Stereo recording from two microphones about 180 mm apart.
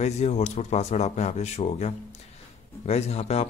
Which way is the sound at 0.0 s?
40° left (ahead or behind).